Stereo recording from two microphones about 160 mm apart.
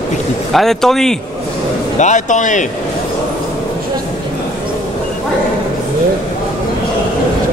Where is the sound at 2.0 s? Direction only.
50° left (ahead or behind).